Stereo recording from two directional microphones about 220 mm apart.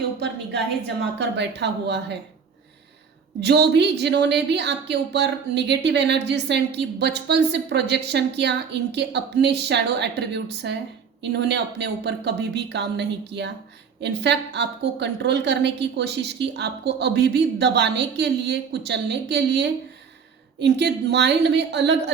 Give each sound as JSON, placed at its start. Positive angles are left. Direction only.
{"t": 1.2, "sound": "speech", "side_deg": -50}
{"t": 3.4, "sound": "speech", "side_deg": -50}